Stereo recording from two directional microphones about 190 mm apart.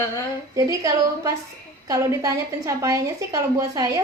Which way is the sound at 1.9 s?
20° right (ahead or behind).